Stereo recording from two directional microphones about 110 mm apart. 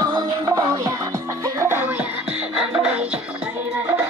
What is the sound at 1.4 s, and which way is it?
Music, 25° right (ahead or behind).